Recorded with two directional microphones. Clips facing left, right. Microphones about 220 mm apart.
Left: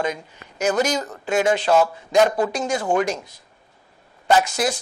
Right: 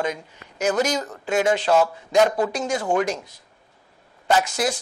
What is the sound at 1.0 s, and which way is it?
Speech, 20° left (ahead or behind).